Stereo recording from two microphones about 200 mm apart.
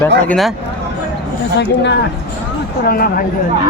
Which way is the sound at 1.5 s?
60° left (ahead or behind).